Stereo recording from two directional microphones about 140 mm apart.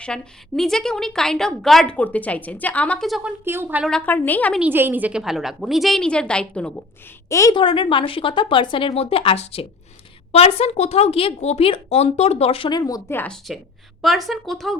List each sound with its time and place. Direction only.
0.0 s a woman's voice: 5° left (ahead or behind)
3.2 s a woman's voice: 15° right (ahead or behind)
3.8 s a woman's voice: 10° left (ahead or behind)
4.6 s a woman's voice: 15° right (ahead or behind); by 6.8 s 10° left (ahead or behind)
7.3 s a woman's voice: 20° left (ahead or behind)
7.5 s a woman's voice: 35° left (ahead or behind)
12.8 s a woman's voice: 20° left (ahead or behind)
14.0 s a woman's voice: centre (ahead or behind)